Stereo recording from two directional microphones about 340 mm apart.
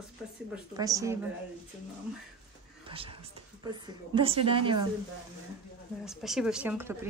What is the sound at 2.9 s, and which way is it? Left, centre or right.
Speech, centre.